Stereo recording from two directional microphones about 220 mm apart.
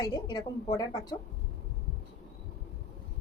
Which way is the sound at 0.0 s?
20° left (ahead or behind).